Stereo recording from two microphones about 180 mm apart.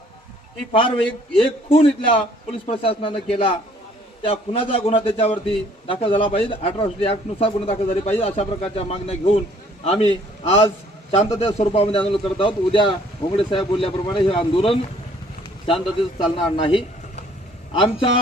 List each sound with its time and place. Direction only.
1.4 s a man's voice: 30° left (ahead or behind)